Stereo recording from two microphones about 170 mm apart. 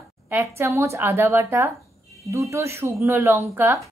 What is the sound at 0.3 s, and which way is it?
A woman's voice, 15° right (ahead or behind).